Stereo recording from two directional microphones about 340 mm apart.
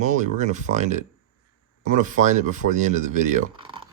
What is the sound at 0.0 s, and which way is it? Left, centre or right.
Speech, right.